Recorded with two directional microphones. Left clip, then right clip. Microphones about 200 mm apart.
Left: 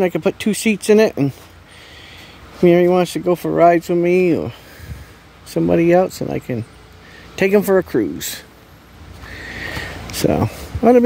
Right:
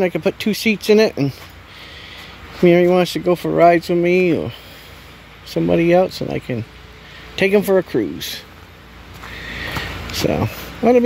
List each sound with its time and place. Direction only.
0.0 s speech: 20° left (ahead or behind)
2.6 s speech: 10° left (ahead or behind)
10.1 s speech: 25° left (ahead or behind)